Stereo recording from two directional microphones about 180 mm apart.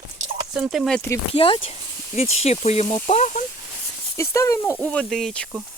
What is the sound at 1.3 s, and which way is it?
Speech, 30° left (ahead or behind).